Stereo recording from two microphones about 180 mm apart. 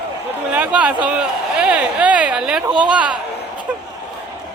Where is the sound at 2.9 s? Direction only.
5° right (ahead or behind).